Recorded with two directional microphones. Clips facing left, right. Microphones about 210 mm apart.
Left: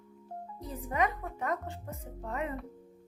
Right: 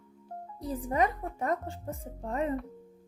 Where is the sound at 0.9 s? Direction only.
30° right (ahead or behind).